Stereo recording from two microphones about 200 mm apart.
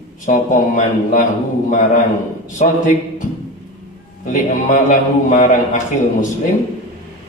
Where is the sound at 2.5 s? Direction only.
35° left (ahead or behind).